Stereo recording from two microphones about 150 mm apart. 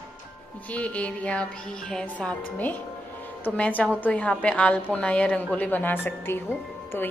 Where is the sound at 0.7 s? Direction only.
10° left (ahead or behind).